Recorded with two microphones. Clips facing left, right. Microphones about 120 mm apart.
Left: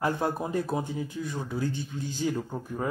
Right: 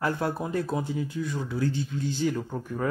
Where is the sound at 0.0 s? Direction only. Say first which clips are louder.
Even; 15° left (ahead or behind).